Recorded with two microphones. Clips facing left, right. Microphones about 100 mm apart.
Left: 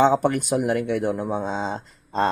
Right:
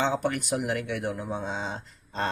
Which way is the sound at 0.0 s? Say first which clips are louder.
Left 8 dB; 40° left (ahead or behind).